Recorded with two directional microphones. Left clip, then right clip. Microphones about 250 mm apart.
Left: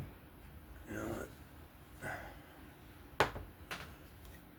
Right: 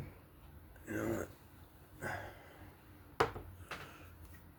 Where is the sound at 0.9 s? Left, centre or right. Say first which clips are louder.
Right 4 dB; right.